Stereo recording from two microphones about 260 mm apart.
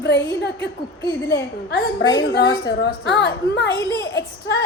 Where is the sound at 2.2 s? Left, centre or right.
Left.